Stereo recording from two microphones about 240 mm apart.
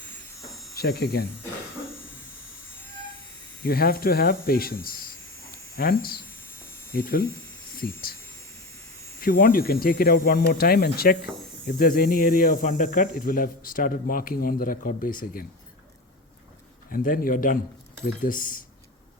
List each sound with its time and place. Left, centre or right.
0.8 s speech: left
3.6 s speech: left
9.2 s speech: left
16.9 s speech: left